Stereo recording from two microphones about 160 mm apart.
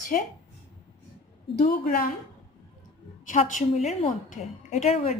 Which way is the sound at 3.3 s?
55° left (ahead or behind).